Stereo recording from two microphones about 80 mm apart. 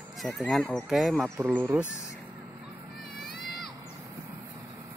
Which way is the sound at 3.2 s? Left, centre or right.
Centre.